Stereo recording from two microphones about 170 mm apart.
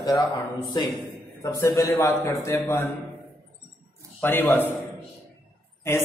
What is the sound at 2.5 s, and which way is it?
Speech, 20° left (ahead or behind).